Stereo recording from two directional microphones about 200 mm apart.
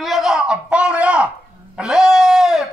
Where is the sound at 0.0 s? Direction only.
Centre (ahead or behind).